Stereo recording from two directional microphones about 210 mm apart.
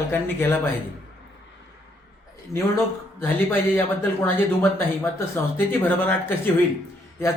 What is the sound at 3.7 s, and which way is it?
Speech, 10° left (ahead or behind).